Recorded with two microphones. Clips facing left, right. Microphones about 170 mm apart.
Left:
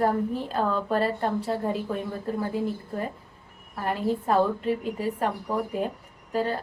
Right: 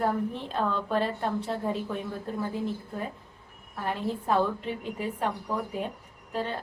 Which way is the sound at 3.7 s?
Centre (ahead or behind).